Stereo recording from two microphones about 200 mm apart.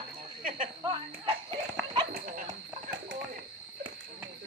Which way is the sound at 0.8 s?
25° right (ahead or behind).